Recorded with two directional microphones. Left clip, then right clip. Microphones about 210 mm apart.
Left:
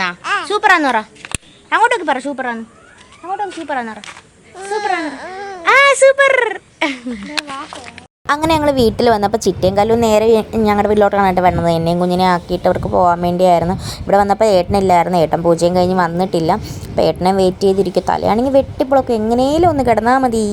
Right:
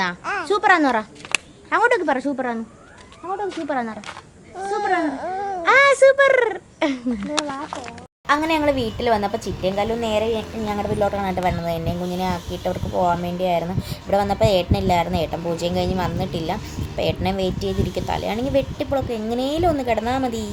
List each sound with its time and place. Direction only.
0.4 s speech: 30° left (ahead or behind)
1.2 s a sound: 5° left (ahead or behind)
1.7 s a woman's voice: 20° left (ahead or behind)
3.7 s a woman's voice: 20° left (ahead or behind)
4.9 s baby cry: 20° right (ahead or behind)
5.6 s speech: 25° left (ahead or behind)
6.7 s speech: 5° left (ahead or behind)
8.3 s a woman's voice: 50° left (ahead or behind)
10.7 s a woman's voice: 30° left (ahead or behind)